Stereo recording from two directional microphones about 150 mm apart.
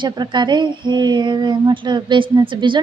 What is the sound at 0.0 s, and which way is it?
Speech, 30° right (ahead or behind).